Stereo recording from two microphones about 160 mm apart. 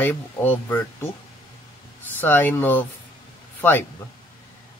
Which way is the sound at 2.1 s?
10° left (ahead or behind).